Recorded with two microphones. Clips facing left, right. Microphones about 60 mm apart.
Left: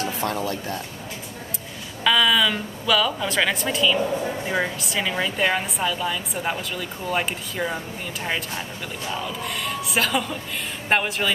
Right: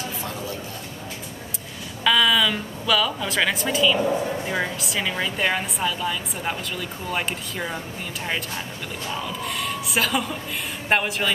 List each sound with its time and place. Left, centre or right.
0.0 s speech: left
2.0 s a woman's voice: centre
9.1 s a woman's voice: centre